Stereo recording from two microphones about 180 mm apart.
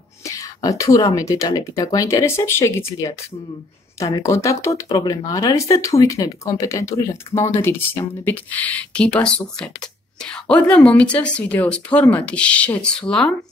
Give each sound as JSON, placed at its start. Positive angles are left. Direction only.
{"t": 0.2, "sound": "speech", "side_deg": 15}